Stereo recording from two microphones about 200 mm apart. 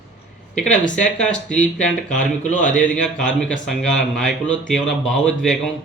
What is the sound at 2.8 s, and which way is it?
Speech, 5° left (ahead or behind).